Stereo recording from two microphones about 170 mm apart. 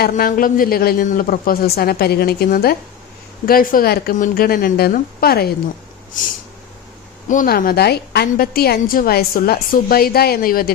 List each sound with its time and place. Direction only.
0.1 s a woman's voice: 55° left (ahead or behind)
7.3 s a woman's voice: 55° left (ahead or behind)